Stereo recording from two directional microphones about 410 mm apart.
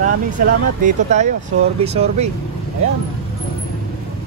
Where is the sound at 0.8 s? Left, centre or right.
Centre.